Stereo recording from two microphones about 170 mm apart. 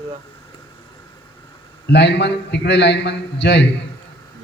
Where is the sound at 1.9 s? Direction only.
90° left.